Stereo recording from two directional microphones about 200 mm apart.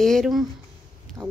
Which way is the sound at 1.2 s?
10° right (ahead or behind).